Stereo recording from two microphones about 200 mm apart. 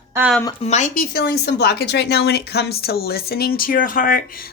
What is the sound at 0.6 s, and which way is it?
Speech, 35° left (ahead or behind).